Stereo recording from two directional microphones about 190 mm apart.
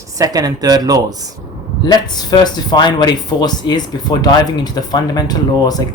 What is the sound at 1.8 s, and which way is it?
Speech, 20° left (ahead or behind).